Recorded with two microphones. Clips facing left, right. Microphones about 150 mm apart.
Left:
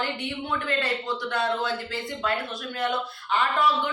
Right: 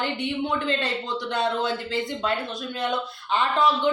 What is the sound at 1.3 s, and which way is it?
Speech, 20° right (ahead or behind).